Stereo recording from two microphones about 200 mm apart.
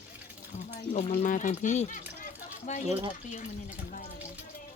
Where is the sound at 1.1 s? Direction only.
40° left (ahead or behind).